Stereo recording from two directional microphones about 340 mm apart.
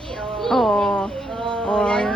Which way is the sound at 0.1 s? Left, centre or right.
Centre.